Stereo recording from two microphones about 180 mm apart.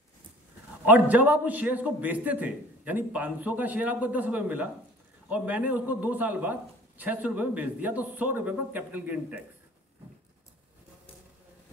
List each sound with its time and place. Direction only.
0.8 s a man's voice: 10° right (ahead or behind)